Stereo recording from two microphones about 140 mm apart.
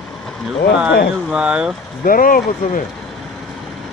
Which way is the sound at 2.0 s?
85° left.